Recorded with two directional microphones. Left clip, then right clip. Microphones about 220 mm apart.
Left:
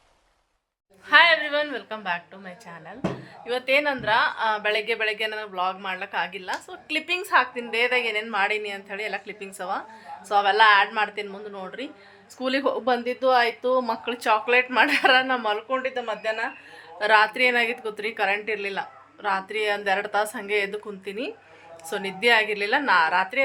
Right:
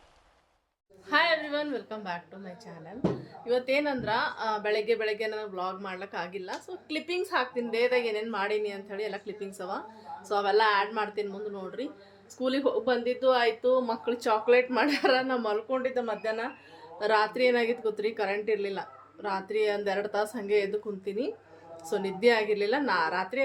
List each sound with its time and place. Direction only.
1.0 s a woman's voice: centre (ahead or behind); by 14.0 s 15° left (ahead or behind)
14.0 s a woman's voice: centre (ahead or behind)